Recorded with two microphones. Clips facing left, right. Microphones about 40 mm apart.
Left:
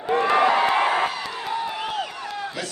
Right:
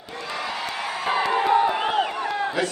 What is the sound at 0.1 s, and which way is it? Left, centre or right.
Crowd, left.